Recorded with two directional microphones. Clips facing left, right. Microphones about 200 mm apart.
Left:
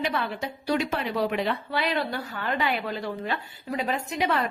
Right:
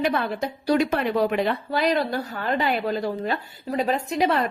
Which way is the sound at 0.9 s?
55° right (ahead or behind).